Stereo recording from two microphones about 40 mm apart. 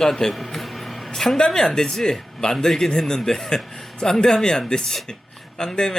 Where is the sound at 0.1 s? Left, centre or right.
Centre.